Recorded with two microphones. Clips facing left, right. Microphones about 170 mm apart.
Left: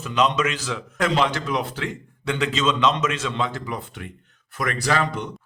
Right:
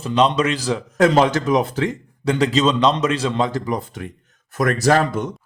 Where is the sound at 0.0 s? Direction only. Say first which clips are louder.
Right 4 dB; 35° right (ahead or behind).